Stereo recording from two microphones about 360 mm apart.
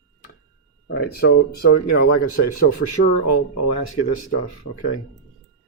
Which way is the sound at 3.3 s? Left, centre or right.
Left.